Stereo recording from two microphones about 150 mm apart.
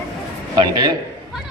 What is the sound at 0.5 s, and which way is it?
Speech, 30° right (ahead or behind).